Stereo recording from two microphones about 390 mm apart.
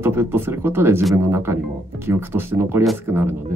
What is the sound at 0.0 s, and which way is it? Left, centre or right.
Speech, centre.